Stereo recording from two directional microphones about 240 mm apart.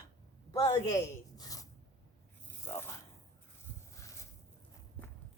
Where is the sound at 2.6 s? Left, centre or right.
Centre.